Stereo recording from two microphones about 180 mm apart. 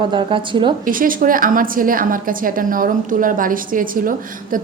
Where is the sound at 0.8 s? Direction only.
50° right (ahead or behind).